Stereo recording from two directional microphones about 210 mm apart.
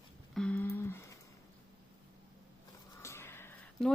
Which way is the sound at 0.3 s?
5° left (ahead or behind).